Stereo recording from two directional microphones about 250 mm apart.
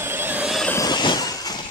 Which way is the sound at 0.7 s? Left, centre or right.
Centre.